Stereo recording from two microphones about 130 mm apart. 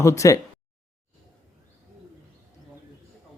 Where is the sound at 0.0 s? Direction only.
25° left (ahead or behind).